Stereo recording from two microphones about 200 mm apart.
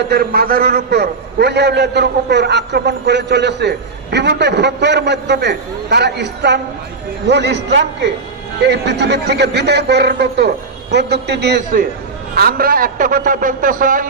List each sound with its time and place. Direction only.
0.1 s a man's voice: 50° right (ahead or behind)